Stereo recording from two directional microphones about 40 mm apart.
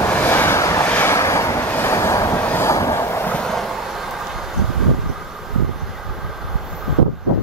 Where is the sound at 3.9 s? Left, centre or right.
Centre.